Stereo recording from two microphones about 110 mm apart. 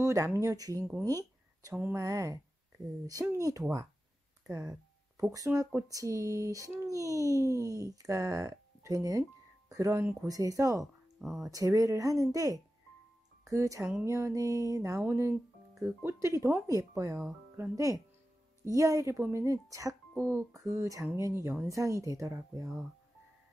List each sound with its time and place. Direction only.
0.0 s speech: 30° right (ahead or behind)
1.0 s a sound: 30° right (ahead or behind)
2.0 s speech: 30° right (ahead or behind)
11.1 s speech: centre (ahead or behind)
11.5 s speech: 30° right (ahead or behind)